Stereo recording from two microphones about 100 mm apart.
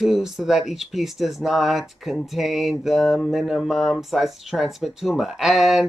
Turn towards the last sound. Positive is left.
turn(degrees=0)  # may be behind; listen again after turning